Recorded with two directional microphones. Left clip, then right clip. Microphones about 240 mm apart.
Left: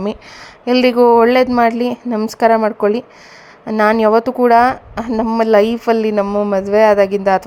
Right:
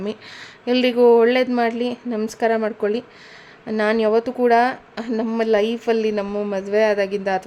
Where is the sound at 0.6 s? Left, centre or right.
Centre.